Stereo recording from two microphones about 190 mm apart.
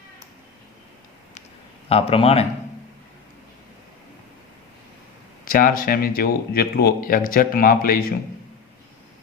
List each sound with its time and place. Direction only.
1.9 s speech: 30° left (ahead or behind)
5.5 s speech: 50° left (ahead or behind)